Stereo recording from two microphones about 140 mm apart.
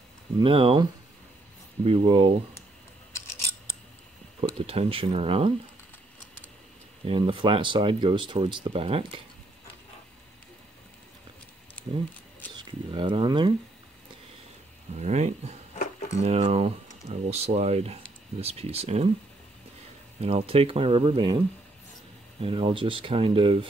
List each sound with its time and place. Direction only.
0.4 s speech: 40° right (ahead or behind)
1.9 s speech: 40° right (ahead or behind)
3.1 s filing: 20° left (ahead or behind)
4.6 s speech: 45° right (ahead or behind)
7.1 s speech: 40° right (ahead or behind)
12.5 s speech: 35° right (ahead or behind)
15.0 s speech: 55° right (ahead or behind)
20.2 s speech: 45° right (ahead or behind)
22.4 s speech: 40° right (ahead or behind)